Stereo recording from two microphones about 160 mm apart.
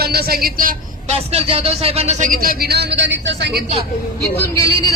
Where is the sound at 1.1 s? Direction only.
40° right (ahead or behind); by 3.6 s 90° right.